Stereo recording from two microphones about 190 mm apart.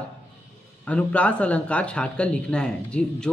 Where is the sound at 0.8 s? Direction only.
5° left (ahead or behind).